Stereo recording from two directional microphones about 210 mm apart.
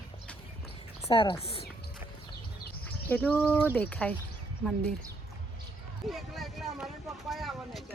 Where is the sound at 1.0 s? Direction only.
25° left (ahead or behind).